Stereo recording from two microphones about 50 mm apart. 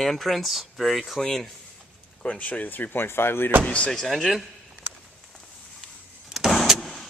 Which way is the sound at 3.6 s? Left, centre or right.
Left.